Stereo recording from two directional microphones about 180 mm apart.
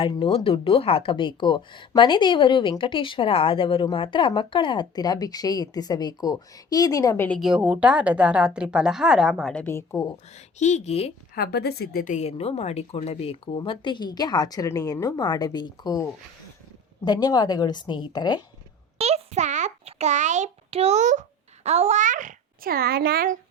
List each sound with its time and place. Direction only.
0.0 s speech: 30° left (ahead or behind)
7.3 s a woman's voice: centre (ahead or behind); by 10.2 s 20° left (ahead or behind)
10.3 s speech: 40° left (ahead or behind)
11.3 s speech: 60° left (ahead or behind); by 16.0 s 20° left (ahead or behind)
17.1 s speech: 20° left (ahead or behind)
18.9 s a child's voice: 35° right (ahead or behind); by 23.4 s 55° right (ahead or behind)